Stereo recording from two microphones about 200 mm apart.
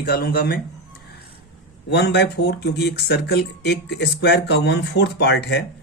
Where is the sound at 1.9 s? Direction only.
55° left (ahead or behind).